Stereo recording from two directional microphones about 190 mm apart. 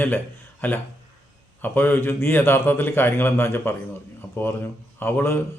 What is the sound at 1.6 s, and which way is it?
Speech, 10° left (ahead or behind).